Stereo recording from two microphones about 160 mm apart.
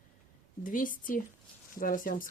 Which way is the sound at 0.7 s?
60° left (ahead or behind).